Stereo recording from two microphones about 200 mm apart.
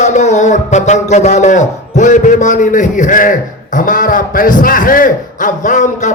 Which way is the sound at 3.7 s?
40° left (ahead or behind).